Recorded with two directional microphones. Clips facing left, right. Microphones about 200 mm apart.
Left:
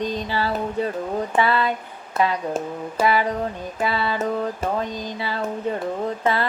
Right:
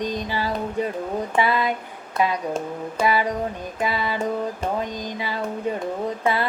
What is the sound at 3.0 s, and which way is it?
Speech, 10° right (ahead or behind).